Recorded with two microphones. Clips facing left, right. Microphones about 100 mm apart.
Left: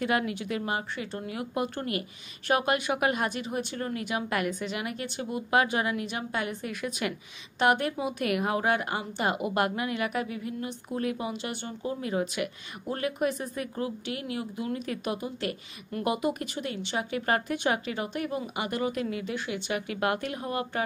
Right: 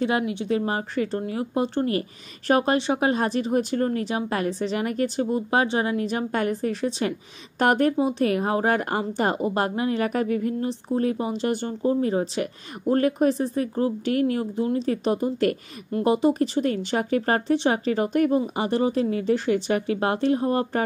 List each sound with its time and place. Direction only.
0.0 s a woman's voice: 25° right (ahead or behind); by 10.7 s 45° right (ahead or behind)
10.7 s a woman's voice: 35° right (ahead or behind)
18.4 s a woman's voice: 30° right (ahead or behind)